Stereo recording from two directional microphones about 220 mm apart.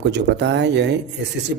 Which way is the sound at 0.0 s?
50° right (ahead or behind).